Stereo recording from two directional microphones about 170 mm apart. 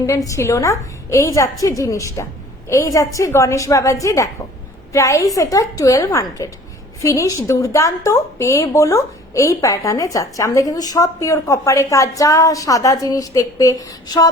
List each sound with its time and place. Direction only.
0.3 s a woman's voice: 15° left (ahead or behind)